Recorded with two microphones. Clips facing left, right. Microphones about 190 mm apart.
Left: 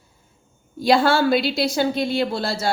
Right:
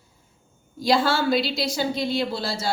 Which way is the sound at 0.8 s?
55° left (ahead or behind).